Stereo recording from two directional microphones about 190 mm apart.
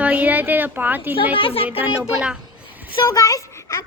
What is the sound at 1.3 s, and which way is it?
Speech, 30° left (ahead or behind).